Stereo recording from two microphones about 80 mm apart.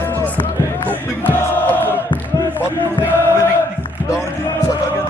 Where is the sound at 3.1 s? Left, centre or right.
Right.